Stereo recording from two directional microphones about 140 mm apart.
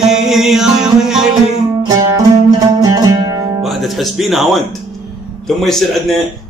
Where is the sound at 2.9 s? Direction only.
25° right (ahead or behind).